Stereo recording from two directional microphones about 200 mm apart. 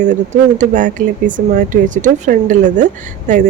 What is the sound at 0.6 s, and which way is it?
Speech, 40° right (ahead or behind).